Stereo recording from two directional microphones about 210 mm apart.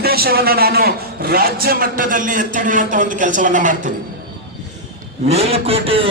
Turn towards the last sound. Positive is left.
turn(degrees=-25)  # may be behind; listen again after turning